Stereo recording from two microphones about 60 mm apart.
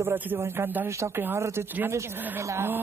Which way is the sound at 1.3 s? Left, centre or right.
Right.